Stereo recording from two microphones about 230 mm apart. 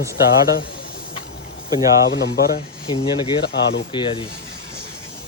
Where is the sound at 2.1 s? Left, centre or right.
Left.